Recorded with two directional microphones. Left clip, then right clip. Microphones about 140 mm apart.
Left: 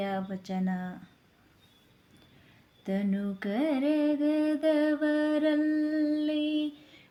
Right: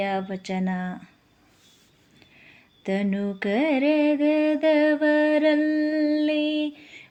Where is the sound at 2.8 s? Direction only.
25° right (ahead or behind).